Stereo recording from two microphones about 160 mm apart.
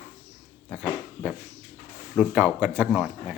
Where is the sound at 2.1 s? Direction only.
5° right (ahead or behind).